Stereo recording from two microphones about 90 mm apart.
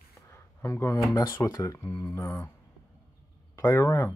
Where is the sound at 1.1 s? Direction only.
50° left (ahead or behind).